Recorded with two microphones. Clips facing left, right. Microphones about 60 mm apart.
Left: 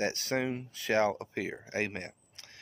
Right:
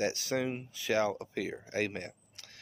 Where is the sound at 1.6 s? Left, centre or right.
Left.